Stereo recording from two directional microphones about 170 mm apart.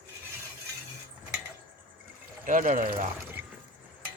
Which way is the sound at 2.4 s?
50° right (ahead or behind).